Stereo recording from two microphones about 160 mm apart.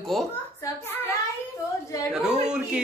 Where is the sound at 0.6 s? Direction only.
15° left (ahead or behind).